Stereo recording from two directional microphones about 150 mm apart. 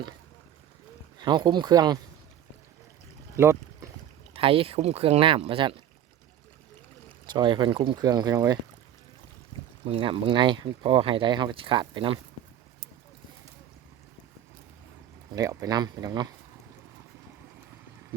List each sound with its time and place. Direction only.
1.2 s speech: 30° right (ahead or behind)
3.3 s a sound: 20° right (ahead or behind)
4.4 s speech: 40° right (ahead or behind)
7.3 s speech: 30° right (ahead or behind)
9.8 s speech: 35° right (ahead or behind)
15.4 s speech: 25° right (ahead or behind)